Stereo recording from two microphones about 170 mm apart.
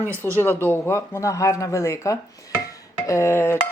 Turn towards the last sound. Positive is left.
turn(degrees=15)  # may be behind; listen again after turning